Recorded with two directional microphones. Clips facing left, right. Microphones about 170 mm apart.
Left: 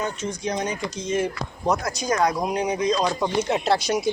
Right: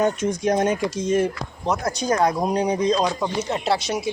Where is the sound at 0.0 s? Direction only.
50° right (ahead or behind).